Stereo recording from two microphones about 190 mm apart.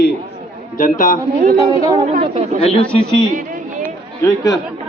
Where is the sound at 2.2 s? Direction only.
30° right (ahead or behind).